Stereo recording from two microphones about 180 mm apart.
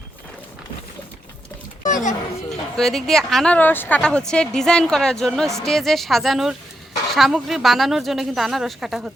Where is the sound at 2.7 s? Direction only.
Centre (ahead or behind).